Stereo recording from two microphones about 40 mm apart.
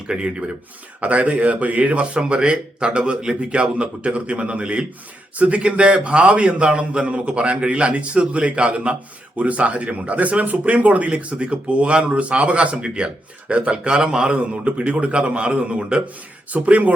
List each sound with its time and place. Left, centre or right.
0.1 s a man's voice: right
1.0 s a man's voice: right
2.1 s a man's voice: right
14.3 s a man's voice: right
16.5 s a man's voice: right